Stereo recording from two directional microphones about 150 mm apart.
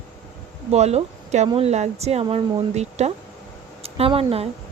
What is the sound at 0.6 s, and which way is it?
Speech, 45° right (ahead or behind).